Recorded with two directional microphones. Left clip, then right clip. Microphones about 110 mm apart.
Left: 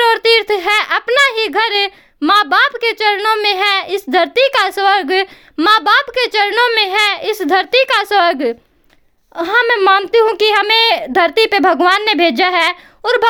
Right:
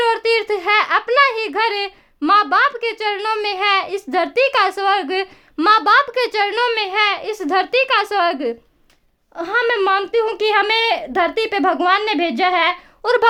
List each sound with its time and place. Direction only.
0.0 s a sound: 35° left (ahead or behind)
3.2 s a woman's voice: 35° left (ahead or behind)
5.5 s a woman's voice: 25° left (ahead or behind)
6.7 s a woman's voice: 40° left (ahead or behind)
13.0 s speech: 20° left (ahead or behind)